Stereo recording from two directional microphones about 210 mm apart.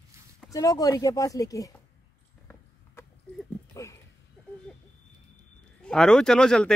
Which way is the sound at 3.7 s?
15° left (ahead or behind).